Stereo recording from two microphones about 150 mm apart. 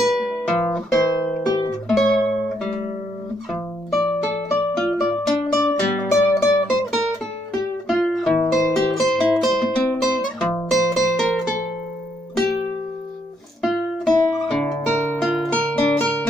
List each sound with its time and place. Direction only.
0.0 s music: centre (ahead or behind)
3.9 s music: centre (ahead or behind)
5.6 s music: 20° left (ahead or behind)
6.3 s music: 5° right (ahead or behind)
13.6 s music: centre (ahead or behind)